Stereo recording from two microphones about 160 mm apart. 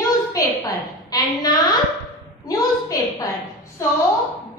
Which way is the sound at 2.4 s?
20° left (ahead or behind).